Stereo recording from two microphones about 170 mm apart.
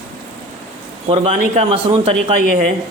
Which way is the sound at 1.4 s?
40° right (ahead or behind).